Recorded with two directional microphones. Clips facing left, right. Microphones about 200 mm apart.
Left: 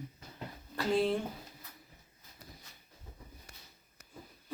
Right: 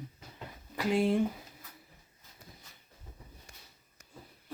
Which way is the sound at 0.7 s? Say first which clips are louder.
Right 2 dB; 15° right (ahead or behind).